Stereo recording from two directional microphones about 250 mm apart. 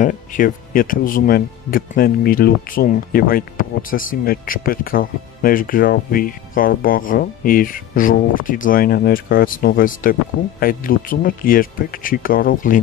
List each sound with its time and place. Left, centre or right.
0.0 s speech: left